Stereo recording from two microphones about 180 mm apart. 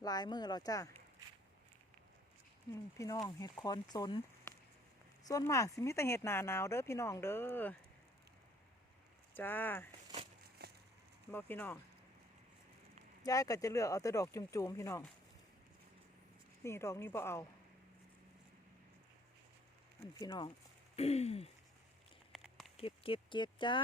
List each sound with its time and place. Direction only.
0.0 s speech: 20° left (ahead or behind)
3.0 s speech: 20° left (ahead or behind)
5.2 s speech: 20° left (ahead or behind)
9.3 s speech: 10° left (ahead or behind)
10.6 s a sound: 60° right (ahead or behind)
11.3 s speech: 10° left (ahead or behind)
13.2 s speech: 20° left (ahead or behind)
16.6 s speech: 15° left (ahead or behind)
20.1 s speech: 20° left (ahead or behind)
20.9 s a sound: 35° left (ahead or behind)
22.3 s a sound: centre (ahead or behind)
22.8 s speech: 30° left (ahead or behind)